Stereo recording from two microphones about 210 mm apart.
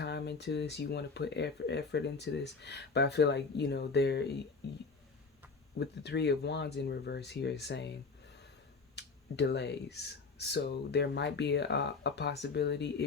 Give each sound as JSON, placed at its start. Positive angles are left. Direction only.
{"t": 0.0, "sound": "speech", "side_deg": 55}
{"t": 5.8, "sound": "speech", "side_deg": 55}
{"t": 9.0, "sound": "speech", "side_deg": 55}